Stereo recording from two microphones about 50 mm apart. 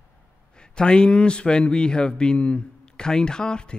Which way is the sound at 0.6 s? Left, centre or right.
Centre.